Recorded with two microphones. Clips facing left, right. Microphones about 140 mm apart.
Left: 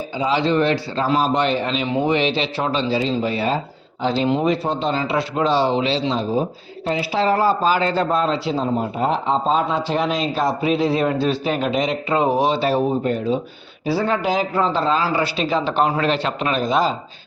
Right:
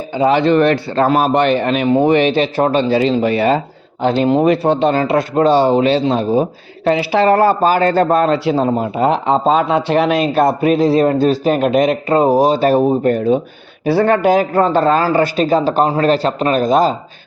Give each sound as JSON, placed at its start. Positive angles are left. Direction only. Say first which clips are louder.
{"t": 0.1, "sound": "speech", "louder": "right 7 dB", "side_deg": -60}
{"t": 4.0, "sound": "a man's voice", "louder": "right 6 dB", "side_deg": -55}
{"t": 4.4, "sound": "a man's voice", "louder": "right 7 dB", "side_deg": -65}
{"t": 6.8, "sound": "a man's voice", "louder": "right 7 dB", "side_deg": -70}